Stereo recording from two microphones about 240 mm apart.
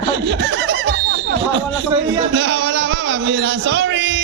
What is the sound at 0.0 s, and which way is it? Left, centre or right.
Snicker, right.